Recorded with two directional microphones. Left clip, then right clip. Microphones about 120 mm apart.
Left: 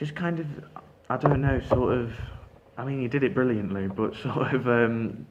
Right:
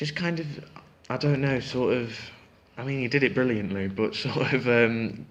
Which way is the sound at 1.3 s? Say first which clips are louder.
Left 2 dB; 45° right (ahead or behind).